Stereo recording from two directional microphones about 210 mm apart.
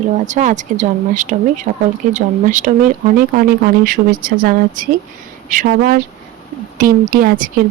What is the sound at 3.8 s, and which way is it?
A woman's voice, 40° right (ahead or behind).